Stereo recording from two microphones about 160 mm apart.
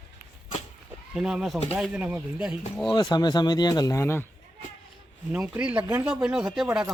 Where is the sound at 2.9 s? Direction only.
25° left (ahead or behind).